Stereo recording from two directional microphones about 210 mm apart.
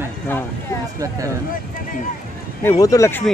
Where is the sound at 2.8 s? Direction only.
15° left (ahead or behind).